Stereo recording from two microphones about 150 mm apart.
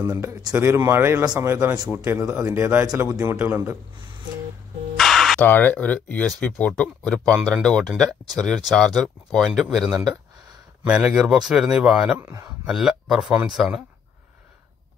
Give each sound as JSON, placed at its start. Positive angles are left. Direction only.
{"t": 0.0, "sound": "speech", "side_deg": -20}
{"t": 4.9, "sound": "a sound", "side_deg": 0}
{"t": 5.5, "sound": "speech", "side_deg": 10}
{"t": 12.2, "sound": "speech", "side_deg": -20}
{"t": 12.6, "sound": "speech", "side_deg": 0}